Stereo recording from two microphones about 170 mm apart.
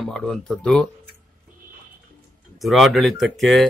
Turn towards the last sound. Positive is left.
turn(degrees=0)  # may be behind; listen again after turning